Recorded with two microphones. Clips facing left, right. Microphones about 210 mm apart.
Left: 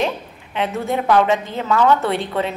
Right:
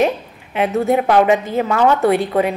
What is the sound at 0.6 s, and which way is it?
A woman's voice, 15° right (ahead or behind).